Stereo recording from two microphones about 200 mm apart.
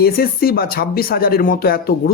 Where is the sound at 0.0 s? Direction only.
50° left (ahead or behind).